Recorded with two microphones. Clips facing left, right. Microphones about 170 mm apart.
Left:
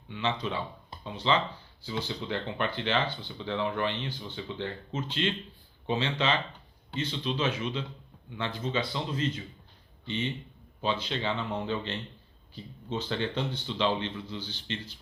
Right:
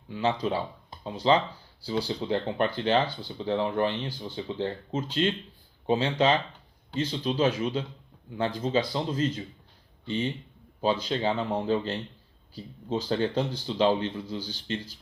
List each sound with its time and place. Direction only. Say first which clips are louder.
0.1 s speech: right 5 dB; 40° right (ahead or behind)